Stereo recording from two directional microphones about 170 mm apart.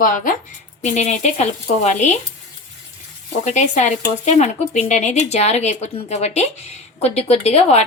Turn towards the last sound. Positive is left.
turn(degrees=40)  # may be behind; listen again after turning